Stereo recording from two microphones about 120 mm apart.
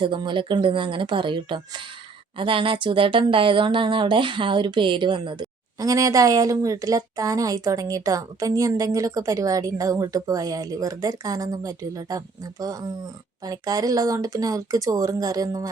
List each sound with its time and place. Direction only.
0.0 s speech: 40° right (ahead or behind)
5.8 s a woman's voice: 30° right (ahead or behind)